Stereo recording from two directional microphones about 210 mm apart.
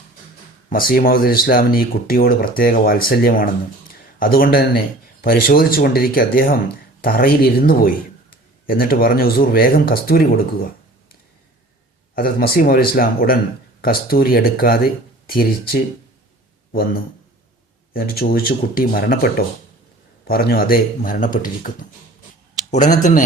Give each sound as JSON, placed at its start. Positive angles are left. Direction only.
{"t": 0.7, "sound": "speech", "side_deg": 45}
{"t": 12.1, "sound": "speech", "side_deg": 45}
{"t": 17.9, "sound": "speech", "side_deg": 45}
{"t": 22.7, "sound": "speech", "side_deg": 35}